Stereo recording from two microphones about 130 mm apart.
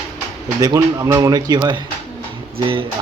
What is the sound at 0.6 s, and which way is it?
Speech, 25° right (ahead or behind).